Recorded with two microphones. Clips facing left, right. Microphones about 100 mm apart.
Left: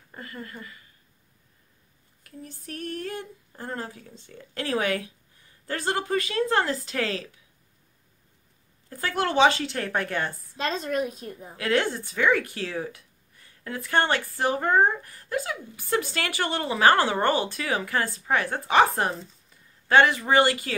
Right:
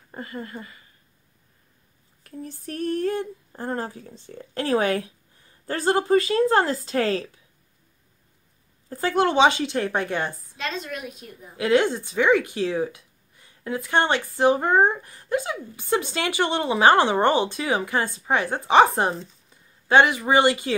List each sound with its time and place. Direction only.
0.1 s speech: 25° right (ahead or behind)
2.2 s speech: 35° right (ahead or behind)
8.8 s speech: 25° right (ahead or behind)
10.6 s a woman's voice: 40° left (ahead or behind)
11.5 s speech: 20° right (ahead or behind)